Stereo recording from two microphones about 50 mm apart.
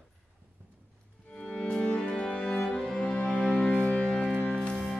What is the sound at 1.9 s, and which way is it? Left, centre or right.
Music, centre.